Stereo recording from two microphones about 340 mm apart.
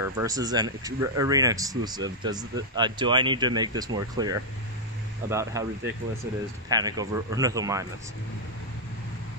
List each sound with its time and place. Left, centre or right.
0.0 s speech: centre
6.7 s speech: centre